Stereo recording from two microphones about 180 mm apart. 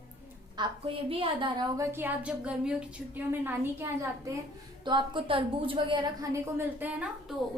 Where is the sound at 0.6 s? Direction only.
25° right (ahead or behind).